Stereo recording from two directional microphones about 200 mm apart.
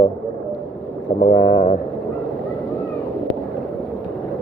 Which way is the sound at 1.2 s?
30° left (ahead or behind).